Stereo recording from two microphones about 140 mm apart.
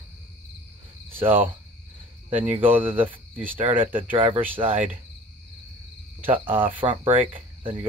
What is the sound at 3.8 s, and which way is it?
Speech, 15° right (ahead or behind).